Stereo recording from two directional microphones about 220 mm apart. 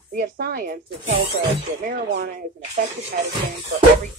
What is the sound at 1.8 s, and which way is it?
Speech, 35° right (ahead or behind).